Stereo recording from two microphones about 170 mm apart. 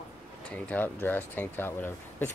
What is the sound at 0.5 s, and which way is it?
Speech, 10° left (ahead or behind).